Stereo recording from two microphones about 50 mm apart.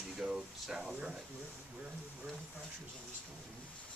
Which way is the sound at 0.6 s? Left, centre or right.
Centre.